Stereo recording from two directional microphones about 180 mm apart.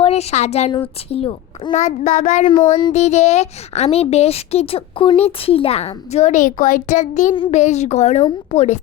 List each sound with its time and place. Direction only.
0.0 s speech: 35° left (ahead or behind)
7.3 s a child's voice: 30° left (ahead or behind)
7.6 s speech: 40° left (ahead or behind)